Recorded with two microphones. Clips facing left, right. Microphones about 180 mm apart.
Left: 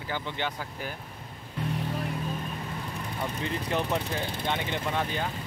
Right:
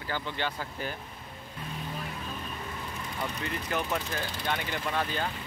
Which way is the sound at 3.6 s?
30° left (ahead or behind).